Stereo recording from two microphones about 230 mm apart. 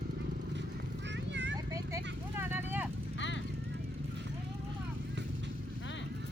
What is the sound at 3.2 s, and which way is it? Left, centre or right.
Clip-clop, left.